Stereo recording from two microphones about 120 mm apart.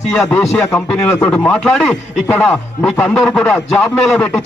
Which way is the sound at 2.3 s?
10° left (ahead or behind).